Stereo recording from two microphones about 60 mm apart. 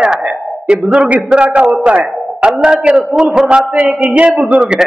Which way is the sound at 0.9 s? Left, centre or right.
Centre.